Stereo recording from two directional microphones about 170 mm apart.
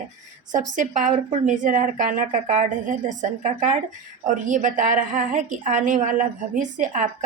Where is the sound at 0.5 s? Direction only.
50° right (ahead or behind).